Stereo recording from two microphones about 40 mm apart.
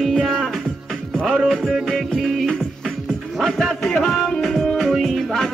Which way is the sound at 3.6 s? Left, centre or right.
Centre.